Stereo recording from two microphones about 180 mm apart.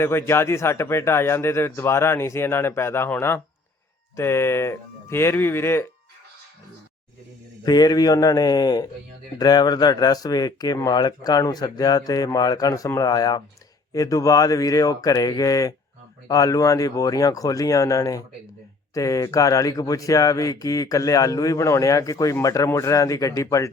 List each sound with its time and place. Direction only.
0.0 s speech: 15° left (ahead or behind)
7.6 s speech: 20° left (ahead or behind)